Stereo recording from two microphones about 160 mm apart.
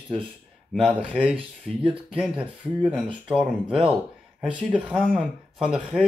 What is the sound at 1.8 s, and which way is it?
Speech, 35° right (ahead or behind).